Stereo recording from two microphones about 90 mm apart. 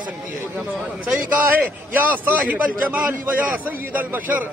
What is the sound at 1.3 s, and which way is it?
A man's voice, 20° right (ahead or behind).